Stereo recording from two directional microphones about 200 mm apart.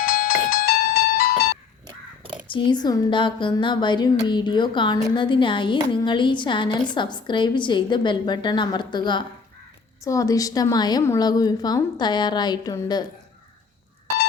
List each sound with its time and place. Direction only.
0.0 s music: 50° left (ahead or behind)
2.5 s a woman's voice: 25° left (ahead or behind)